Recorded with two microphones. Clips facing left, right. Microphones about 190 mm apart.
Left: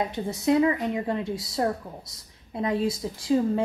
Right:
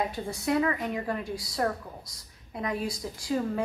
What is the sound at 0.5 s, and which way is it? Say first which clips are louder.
Speech: left 5 dB; 20° left (ahead or behind).